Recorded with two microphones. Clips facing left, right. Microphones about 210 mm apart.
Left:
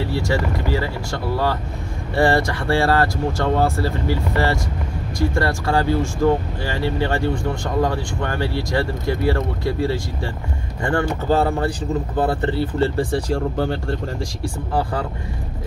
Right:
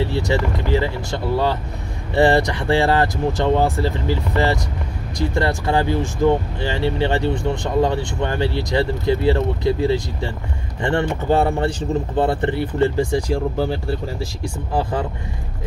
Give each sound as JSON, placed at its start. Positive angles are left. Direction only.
{"t": 0.1, "sound": "speech", "side_deg": -20}
{"t": 14.7, "sound": "speech", "side_deg": -20}